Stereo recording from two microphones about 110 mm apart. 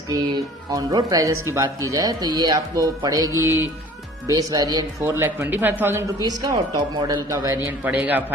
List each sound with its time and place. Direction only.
0.7 s speech: 35° right (ahead or behind)
3.4 s speech: 20° right (ahead or behind)
4.3 s speech: 35° right (ahead or behind)
6.4 s speech: 40° right (ahead or behind)
7.9 s speech: 15° right (ahead or behind)